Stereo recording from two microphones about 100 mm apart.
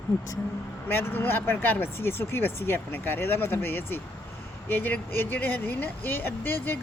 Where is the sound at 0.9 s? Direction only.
20° left (ahead or behind).